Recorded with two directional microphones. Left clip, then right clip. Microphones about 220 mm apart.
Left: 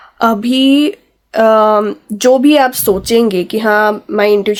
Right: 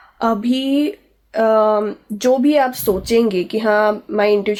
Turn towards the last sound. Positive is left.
turn(degrees=35)  # may be behind; listen again after turning